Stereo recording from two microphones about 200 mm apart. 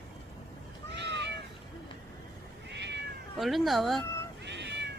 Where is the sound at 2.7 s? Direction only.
60° right (ahead or behind).